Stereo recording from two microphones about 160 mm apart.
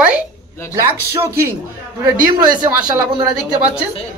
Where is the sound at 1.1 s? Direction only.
15° right (ahead or behind).